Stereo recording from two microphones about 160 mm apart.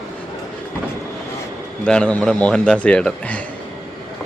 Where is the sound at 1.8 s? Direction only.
5° left (ahead or behind).